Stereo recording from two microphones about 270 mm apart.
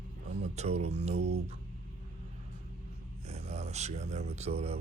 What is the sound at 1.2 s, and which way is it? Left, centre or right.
Music, right.